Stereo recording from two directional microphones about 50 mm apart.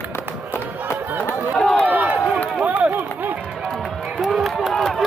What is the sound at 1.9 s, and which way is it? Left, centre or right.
Run, right.